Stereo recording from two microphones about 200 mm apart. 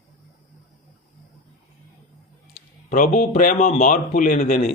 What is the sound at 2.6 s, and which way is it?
Speech, 45° left (ahead or behind).